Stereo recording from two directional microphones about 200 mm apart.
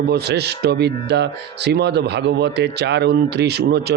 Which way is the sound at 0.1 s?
55° right (ahead or behind).